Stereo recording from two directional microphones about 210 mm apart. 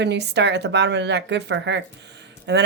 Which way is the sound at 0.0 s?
55° right (ahead or behind).